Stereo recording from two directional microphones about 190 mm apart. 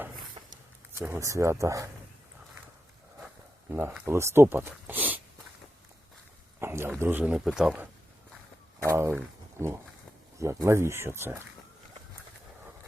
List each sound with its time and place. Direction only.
0.9 s speech: 15° right (ahead or behind)
3.7 s speech: 10° right (ahead or behind)
6.6 s a sound: 10° right (ahead or behind)
7.0 s speech: 10° right (ahead or behind)
8.9 s speech: 10° right (ahead or behind)